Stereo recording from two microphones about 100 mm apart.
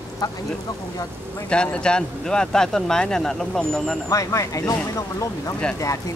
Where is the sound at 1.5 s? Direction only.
10° left (ahead or behind).